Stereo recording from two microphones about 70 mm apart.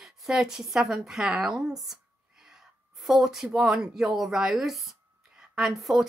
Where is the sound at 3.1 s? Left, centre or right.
Centre.